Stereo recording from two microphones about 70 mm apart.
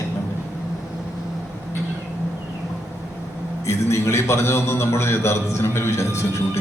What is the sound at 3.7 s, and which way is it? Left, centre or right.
A man's voice, left.